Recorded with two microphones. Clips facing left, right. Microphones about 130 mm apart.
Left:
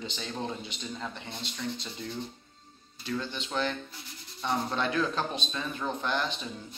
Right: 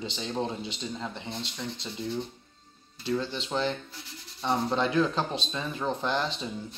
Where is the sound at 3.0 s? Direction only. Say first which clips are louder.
Right 4 dB; 30° right (ahead or behind).